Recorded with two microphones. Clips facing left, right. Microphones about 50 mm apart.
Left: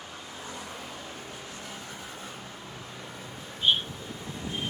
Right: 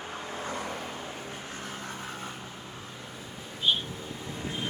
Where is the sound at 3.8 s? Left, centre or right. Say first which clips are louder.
Right 1 dB; right.